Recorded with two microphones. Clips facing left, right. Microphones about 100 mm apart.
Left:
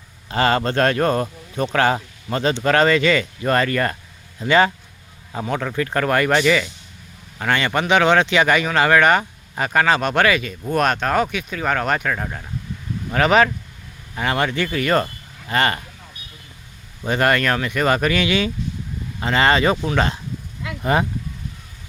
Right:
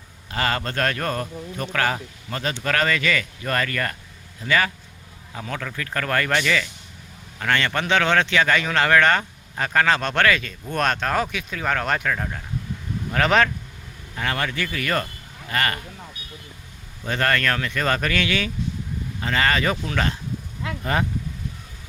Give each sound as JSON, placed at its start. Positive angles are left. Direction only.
{"t": 0.3, "sound": "speech", "side_deg": 30}
{"t": 14.2, "sound": "speech", "side_deg": 20}
{"t": 17.1, "sound": "speech", "side_deg": 15}